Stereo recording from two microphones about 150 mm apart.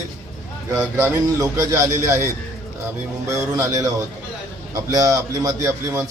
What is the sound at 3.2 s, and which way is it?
A man's voice, 20° right (ahead or behind).